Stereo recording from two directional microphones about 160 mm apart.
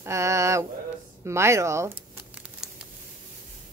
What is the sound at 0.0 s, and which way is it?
Mantra, 20° right (ahead or behind).